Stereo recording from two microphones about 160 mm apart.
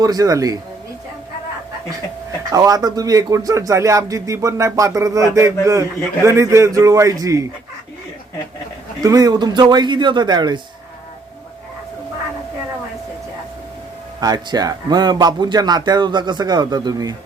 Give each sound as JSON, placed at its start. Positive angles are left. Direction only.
{"t": 0.0, "sound": "speech", "side_deg": -20}
{"t": 2.5, "sound": "speech", "side_deg": -25}
{"t": 9.0, "sound": "speech", "side_deg": -20}
{"t": 14.2, "sound": "speech", "side_deg": -25}